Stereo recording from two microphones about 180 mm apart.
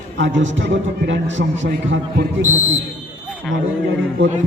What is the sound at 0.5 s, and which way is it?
A man's voice, 75° right (ahead or behind).